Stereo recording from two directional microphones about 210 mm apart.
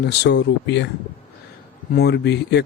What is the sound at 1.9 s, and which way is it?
Speech, 50° left (ahead or behind).